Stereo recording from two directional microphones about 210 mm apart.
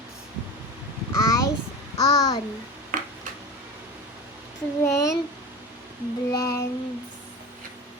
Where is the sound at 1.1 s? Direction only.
15° left (ahead or behind).